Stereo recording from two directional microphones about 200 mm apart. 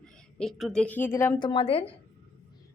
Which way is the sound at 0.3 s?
Centre (ahead or behind).